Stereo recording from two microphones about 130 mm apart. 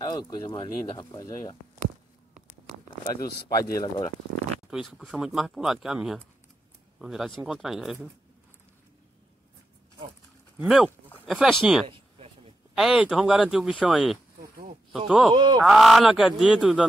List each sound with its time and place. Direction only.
0.0 s speech: 30° left (ahead or behind)
3.1 s speech: 25° left (ahead or behind)
4.6 s speech: centre (ahead or behind)
10.6 s speech: 5° right (ahead or behind)
15.3 s honk: 35° right (ahead or behind)
15.6 s speech: centre (ahead or behind)